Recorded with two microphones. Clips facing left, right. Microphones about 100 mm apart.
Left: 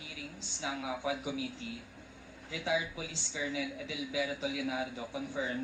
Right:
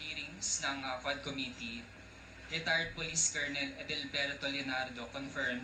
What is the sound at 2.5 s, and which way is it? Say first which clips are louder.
A man's voice: left 4 dB; 35° left (ahead or behind).